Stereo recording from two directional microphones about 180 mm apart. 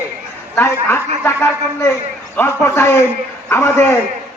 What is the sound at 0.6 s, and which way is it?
A man's voice, 15° left (ahead or behind).